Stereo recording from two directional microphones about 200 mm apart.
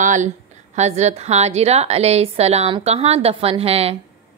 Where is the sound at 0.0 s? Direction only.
40° right (ahead or behind).